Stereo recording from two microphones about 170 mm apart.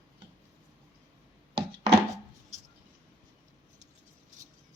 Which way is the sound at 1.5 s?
30° right (ahead or behind).